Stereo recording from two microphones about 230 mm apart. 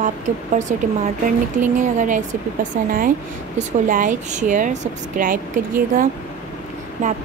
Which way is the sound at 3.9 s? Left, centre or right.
Right.